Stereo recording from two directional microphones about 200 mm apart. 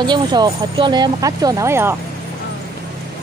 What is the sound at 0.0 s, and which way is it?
Speech, 20° right (ahead or behind).